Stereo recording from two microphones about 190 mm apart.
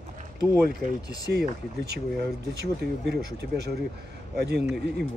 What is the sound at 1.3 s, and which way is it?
Speech, 60° right (ahead or behind).